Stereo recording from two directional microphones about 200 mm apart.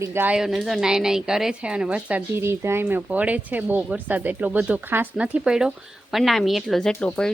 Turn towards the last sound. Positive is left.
turn(degrees=5)  # may be behind; listen again after turning